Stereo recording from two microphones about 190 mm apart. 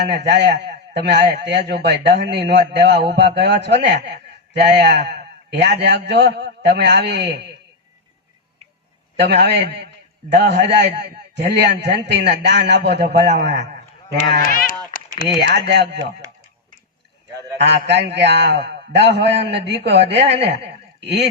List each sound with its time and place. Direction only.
0.1 s a man's voice: 65° right (ahead or behind)
9.1 s a man's voice: 65° right (ahead or behind)
14.4 s speech: 45° left (ahead or behind)
15.4 s a man's voice: 60° right (ahead or behind)
17.6 s a man's voice: 65° right (ahead or behind)
20.7 s a sound: 65° right (ahead or behind)